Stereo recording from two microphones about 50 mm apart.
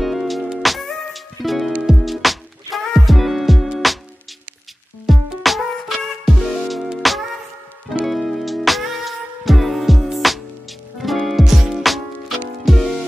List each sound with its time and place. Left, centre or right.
0.0 s music: centre
5.0 s music: centre